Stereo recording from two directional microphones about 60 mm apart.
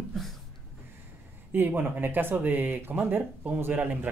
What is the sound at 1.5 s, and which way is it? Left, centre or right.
Speech, right.